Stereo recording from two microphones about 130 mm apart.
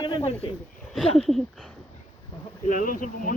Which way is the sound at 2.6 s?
90° left.